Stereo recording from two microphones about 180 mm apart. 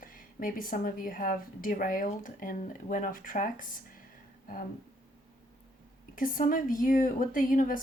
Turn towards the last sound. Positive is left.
turn(degrees=50)  # may be behind; listen again after turning